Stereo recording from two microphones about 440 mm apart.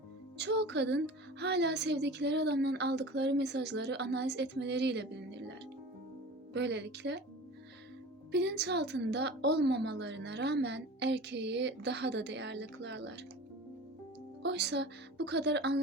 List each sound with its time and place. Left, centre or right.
0.3 s a woman's voice: right
6.5 s a woman's voice: right
8.3 s a woman's voice: right
14.4 s a woman's voice: right